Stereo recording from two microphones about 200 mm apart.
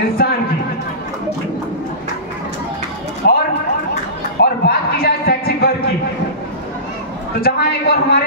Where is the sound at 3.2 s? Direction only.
50° left (ahead or behind).